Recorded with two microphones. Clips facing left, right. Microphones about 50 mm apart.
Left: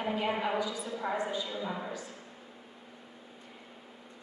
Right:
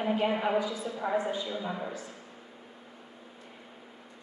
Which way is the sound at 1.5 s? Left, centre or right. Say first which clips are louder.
Right 1 dB; centre.